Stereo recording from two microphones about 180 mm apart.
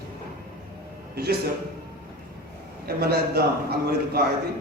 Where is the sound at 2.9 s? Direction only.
60° right (ahead or behind).